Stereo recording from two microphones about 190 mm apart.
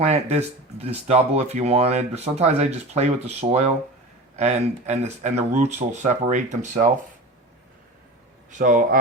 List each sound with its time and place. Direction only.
0.0 s speech: 35° right (ahead or behind)
8.4 s speech: 45° right (ahead or behind)